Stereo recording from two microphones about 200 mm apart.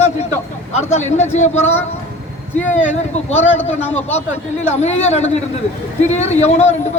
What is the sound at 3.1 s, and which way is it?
Speech, 35° left (ahead or behind).